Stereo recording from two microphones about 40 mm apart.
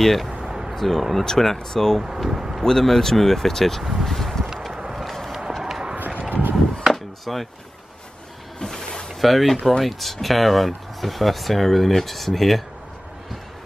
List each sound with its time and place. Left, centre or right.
0.0 s speech: centre
0.3 s a sound: centre
0.7 s speech: centre
2.0 s speech: centre
2.6 s speech: centre
3.8 s speech: centre
4.1 s a sound: centre
5.6 s run: centre
5.9 s a sound: right
6.9 s chop: centre
8.5 s a sound: centre
9.2 s speech: centre